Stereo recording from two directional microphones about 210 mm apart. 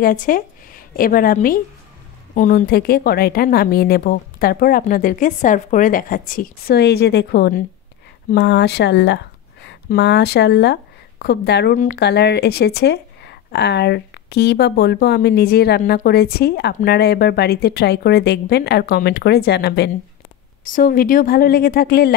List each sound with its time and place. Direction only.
0.0 s a woman's voice: 40° left (ahead or behind)
12.0 s a woman's voice: 50° left (ahead or behind)
20.6 s a woman's voice: 40° left (ahead or behind)